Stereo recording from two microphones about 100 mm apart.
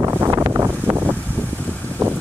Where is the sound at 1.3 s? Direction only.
15° left (ahead or behind).